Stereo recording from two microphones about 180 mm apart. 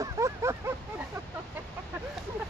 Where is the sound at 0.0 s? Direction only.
15° right (ahead or behind).